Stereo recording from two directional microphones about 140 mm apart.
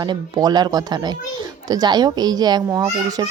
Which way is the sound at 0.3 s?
30° right (ahead or behind).